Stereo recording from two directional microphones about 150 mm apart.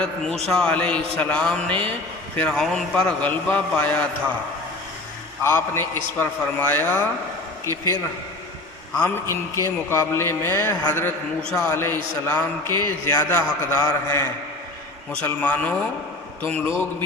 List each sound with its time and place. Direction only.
0.4 s a man's voice: 5° left (ahead or behind)
5.4 s a man's voice: 15° left (ahead or behind)
9.0 s a man's voice: 15° left (ahead or behind)